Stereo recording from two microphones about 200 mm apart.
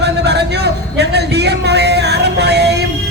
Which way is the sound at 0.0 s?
55° right (ahead or behind).